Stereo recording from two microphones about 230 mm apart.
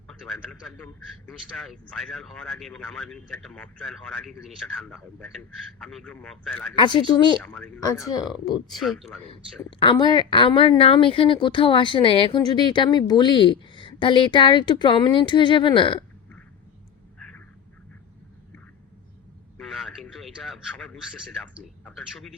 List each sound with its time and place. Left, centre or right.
0.1 s speech: centre
6.7 s speech: left
7.4 s speech: centre
9.6 s speech: left
19.5 s radio: centre